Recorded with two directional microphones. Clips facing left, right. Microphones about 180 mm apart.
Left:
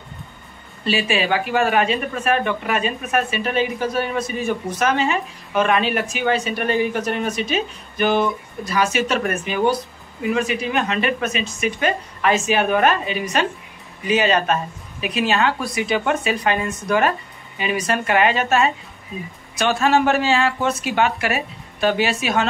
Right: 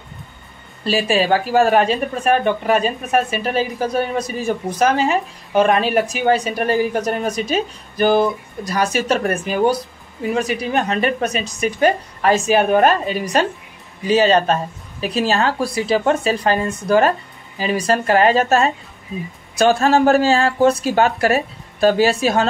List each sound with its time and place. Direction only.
0.8 s speech: 40° right (ahead or behind)